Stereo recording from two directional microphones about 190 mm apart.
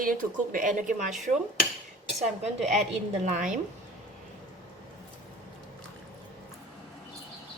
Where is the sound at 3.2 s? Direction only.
40° right (ahead or behind).